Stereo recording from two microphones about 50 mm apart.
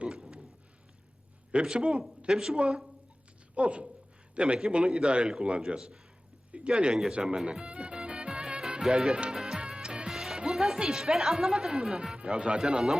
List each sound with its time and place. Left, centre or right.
0.0 s a sound: centre
1.6 s a man's voice: centre
7.1 s music: centre
9.0 s a man's voice: right
9.3 s music: centre
10.1 s music: centre
10.3 s speech: centre